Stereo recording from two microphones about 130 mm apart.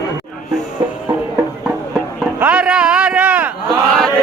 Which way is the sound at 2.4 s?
10° right (ahead or behind).